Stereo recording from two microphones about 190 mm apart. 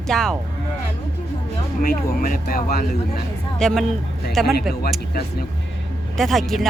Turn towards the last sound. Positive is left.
turn(degrees=0)  # may be behind; listen again after turning